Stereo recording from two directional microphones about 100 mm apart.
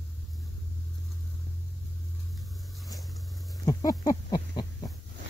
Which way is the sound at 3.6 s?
40° left (ahead or behind).